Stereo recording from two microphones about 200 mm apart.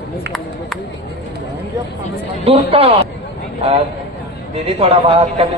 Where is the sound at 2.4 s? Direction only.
30° right (ahead or behind).